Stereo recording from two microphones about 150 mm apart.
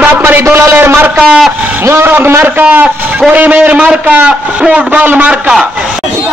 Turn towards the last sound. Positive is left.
turn(degrees=-10)  # may be behind; listen again after turning